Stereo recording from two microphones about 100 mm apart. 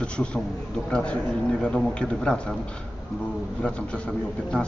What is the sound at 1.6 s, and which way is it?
Speech, 10° left (ahead or behind).